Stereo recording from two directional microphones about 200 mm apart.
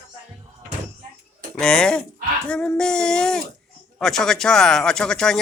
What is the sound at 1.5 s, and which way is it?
Speech, 5° left (ahead or behind).